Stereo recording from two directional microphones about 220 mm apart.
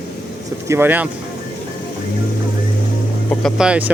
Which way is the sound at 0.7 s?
10° right (ahead or behind).